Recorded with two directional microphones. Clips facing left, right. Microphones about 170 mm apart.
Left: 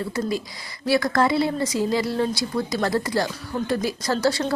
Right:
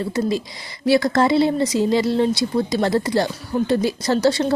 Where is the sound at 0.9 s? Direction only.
25° right (ahead or behind).